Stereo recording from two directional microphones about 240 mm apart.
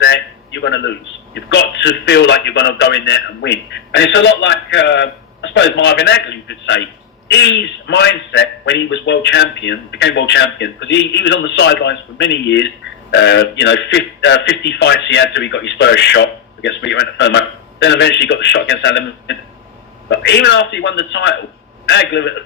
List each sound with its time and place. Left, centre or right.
0.0 s a man's voice: left